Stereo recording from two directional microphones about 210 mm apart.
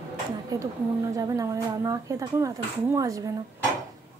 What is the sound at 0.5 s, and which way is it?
A woman's voice, 15° right (ahead or behind).